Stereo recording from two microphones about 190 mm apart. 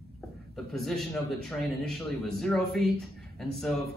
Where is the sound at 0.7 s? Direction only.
Centre (ahead or behind).